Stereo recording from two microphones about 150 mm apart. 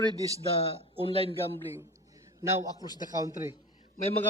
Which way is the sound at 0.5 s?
40° left (ahead or behind).